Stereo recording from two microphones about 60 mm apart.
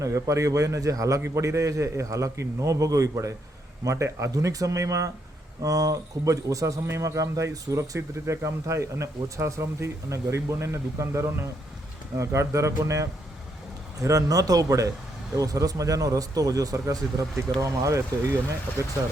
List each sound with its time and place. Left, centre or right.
0.0 s speech: right
4.3 s speech: right
5.6 s speech: right
6.8 s speech: right